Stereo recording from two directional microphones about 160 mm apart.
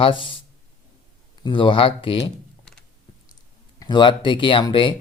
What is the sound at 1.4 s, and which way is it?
Speech, 30° left (ahead or behind).